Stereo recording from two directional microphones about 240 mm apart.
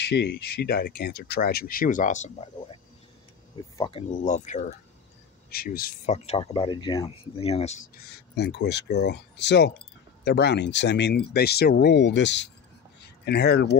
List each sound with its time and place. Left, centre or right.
0.1 s speech: left